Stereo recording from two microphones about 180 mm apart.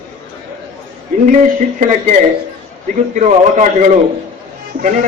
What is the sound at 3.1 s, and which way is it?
A man's voice, 45° right (ahead or behind).